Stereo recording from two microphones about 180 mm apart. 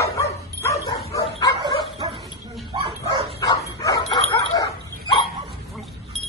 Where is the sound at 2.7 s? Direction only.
25° right (ahead or behind).